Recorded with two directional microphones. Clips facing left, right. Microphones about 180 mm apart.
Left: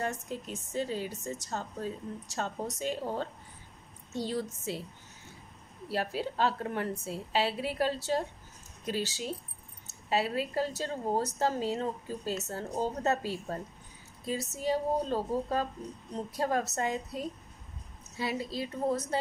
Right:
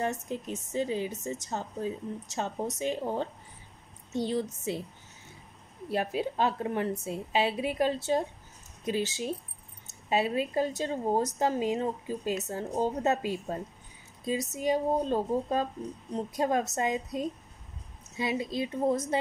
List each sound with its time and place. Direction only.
0.0 s a woman's voice: 20° right (ahead or behind)
5.9 s a woman's voice: 20° right (ahead or behind)
14.6 s a woman's voice: 20° right (ahead or behind)